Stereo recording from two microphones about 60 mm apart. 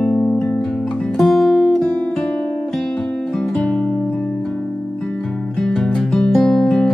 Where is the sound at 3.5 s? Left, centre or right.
Centre.